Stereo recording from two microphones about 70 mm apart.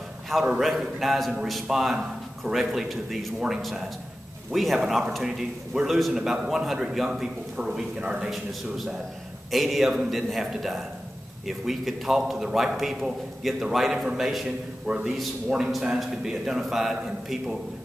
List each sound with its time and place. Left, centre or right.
0.5 s a man's voice: centre
14.9 s a man's voice: centre
15.1 s a man's voice: centre